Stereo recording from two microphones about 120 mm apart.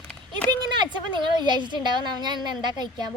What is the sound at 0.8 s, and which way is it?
A woman's voice, 40° right (ahead or behind).